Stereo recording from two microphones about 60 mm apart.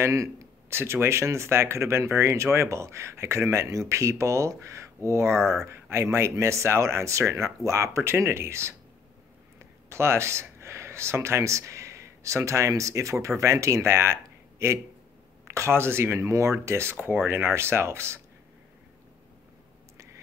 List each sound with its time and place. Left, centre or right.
0.0 s speech: right
16.9 s speech: right